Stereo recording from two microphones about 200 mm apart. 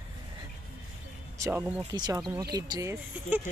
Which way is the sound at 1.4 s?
10° right (ahead or behind).